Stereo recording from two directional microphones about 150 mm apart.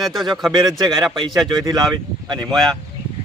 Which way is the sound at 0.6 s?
25° right (ahead or behind).